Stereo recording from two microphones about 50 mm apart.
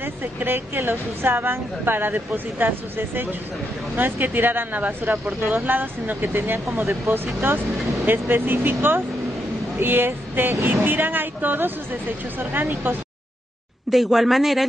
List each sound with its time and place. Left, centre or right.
0.0 s a woman's voice: right
6.3 s a woman's voice: right
7.7 s vehicle: centre
8.1 s a woman's voice: right
13.8 s speech: centre